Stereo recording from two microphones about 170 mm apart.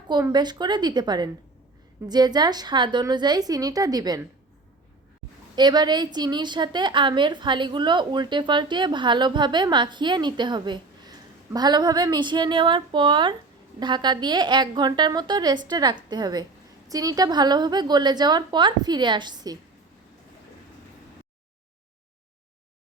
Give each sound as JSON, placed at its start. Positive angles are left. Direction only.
{"t": 0.1, "sound": "a woman's voice", "side_deg": -25}
{"t": 5.5, "sound": "a woman's voice", "side_deg": -25}